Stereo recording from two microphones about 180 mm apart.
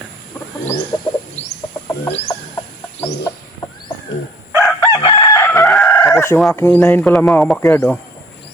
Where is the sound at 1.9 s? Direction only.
15° left (ahead or behind).